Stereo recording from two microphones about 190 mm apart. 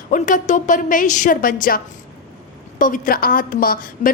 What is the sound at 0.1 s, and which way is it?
A woman's voice, 45° left (ahead or behind).